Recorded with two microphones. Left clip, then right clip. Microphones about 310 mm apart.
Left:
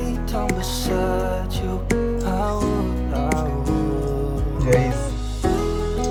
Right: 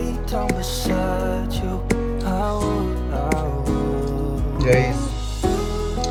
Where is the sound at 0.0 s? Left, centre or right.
Centre.